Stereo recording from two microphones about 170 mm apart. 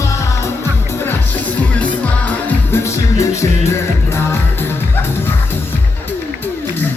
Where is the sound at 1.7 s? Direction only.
10° left (ahead or behind).